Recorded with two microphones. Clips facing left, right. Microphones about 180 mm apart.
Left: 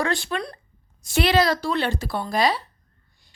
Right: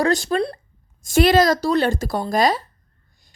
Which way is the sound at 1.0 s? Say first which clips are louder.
Right 5 dB; 45° right (ahead or behind).